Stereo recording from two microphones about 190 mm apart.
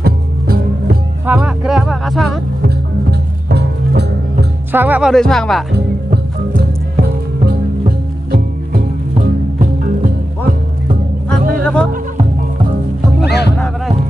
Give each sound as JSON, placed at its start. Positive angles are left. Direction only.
{"t": 0.0, "sound": "music", "side_deg": -55}
{"t": 1.2, "sound": "speech", "side_deg": -10}
{"t": 3.1, "sound": "music", "side_deg": -60}
{"t": 4.7, "sound": "speech", "side_deg": -10}
{"t": 5.1, "sound": "speech", "side_deg": 5}
{"t": 6.0, "sound": "music", "side_deg": -50}
{"t": 11.6, "sound": "music", "side_deg": 5}
{"t": 13.2, "sound": "music", "side_deg": 60}